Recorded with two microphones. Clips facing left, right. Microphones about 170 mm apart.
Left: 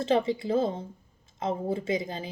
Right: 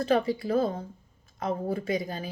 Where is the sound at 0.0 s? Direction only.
25° left (ahead or behind).